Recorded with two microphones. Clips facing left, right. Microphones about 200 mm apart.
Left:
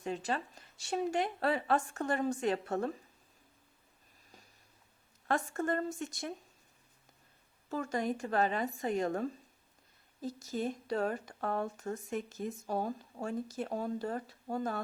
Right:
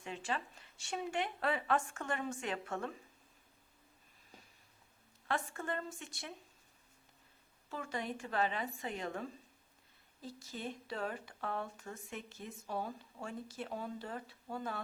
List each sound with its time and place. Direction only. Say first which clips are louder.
0.0 s a woman's voice: left 5 dB; 40° left (ahead or behind)
5.3 s speech: left 6 dB; 45° left (ahead or behind)
7.7 s speech: left 7 dB; 45° left (ahead or behind)